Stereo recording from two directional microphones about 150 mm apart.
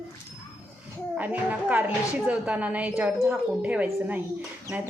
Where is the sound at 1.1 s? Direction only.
10° right (ahead or behind).